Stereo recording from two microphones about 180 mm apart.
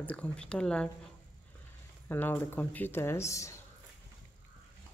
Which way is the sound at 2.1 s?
10° left (ahead or behind).